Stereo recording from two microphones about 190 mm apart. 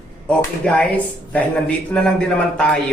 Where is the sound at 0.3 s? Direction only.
5° left (ahead or behind).